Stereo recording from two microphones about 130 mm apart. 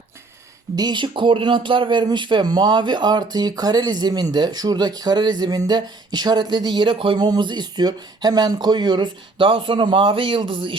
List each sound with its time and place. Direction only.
0.8 s speech: 35° right (ahead or behind)